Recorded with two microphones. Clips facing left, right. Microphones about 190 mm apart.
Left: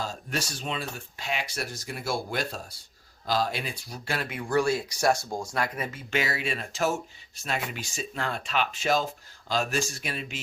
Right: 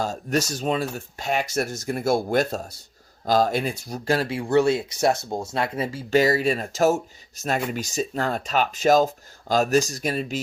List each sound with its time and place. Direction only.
0.0 s speech: 45° right (ahead or behind)